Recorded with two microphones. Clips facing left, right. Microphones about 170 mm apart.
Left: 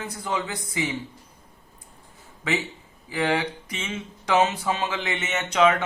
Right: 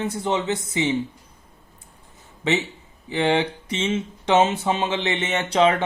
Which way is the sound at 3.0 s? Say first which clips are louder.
Right 4 dB; 25° right (ahead or behind).